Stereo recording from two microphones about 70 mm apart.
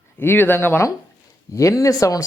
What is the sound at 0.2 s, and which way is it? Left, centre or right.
Speech, left.